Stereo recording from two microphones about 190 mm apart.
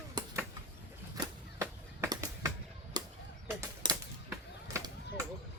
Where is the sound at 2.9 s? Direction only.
20° right (ahead or behind).